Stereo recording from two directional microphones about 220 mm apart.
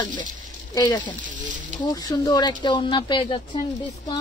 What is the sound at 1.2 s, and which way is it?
Speech, 35° right (ahead or behind).